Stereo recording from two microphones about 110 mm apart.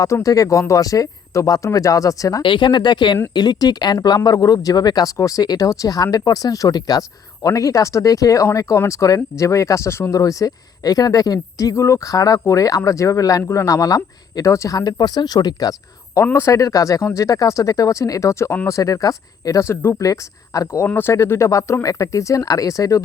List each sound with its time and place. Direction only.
0.0 s speech: 30° left (ahead or behind)
2.4 s speech: 45° left (ahead or behind)
16.2 s speech: 25° left (ahead or behind)
20.8 s speech: 20° left (ahead or behind)